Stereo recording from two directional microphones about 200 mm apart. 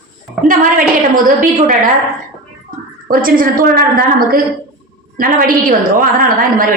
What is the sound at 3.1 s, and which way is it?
A woman's voice, 45° right (ahead or behind).